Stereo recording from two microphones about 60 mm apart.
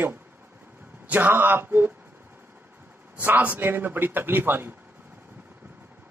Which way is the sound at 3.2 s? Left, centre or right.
Right.